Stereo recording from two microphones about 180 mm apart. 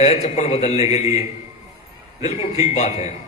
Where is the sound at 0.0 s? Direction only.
35° left (ahead or behind).